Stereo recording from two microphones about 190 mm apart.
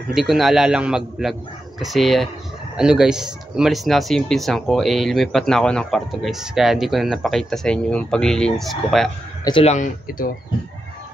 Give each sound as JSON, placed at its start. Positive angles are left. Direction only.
{"t": 0.1, "sound": "speech", "side_deg": 0}
{"t": 9.4, "sound": "speech", "side_deg": 25}